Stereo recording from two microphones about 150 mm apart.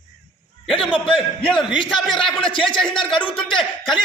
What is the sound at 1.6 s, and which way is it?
Speech, 35° left (ahead or behind).